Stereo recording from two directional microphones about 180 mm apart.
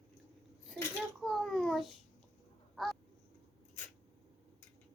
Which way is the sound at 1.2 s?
Centre (ahead or behind).